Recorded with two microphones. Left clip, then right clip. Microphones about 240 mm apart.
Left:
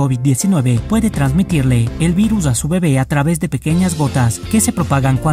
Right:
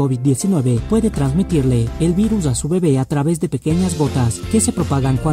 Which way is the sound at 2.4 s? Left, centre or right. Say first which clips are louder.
Even; left.